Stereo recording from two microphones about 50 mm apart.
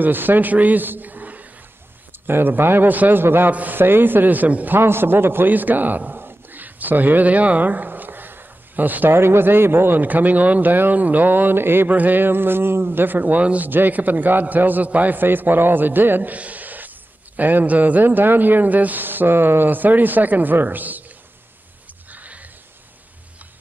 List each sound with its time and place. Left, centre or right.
0.0 s a man's voice: right
2.2 s a man's voice: right
4.7 s a man's voice: right
9.1 s speech: right
11.9 s speech: right
13.7 s speech: right
22.1 s a sound: right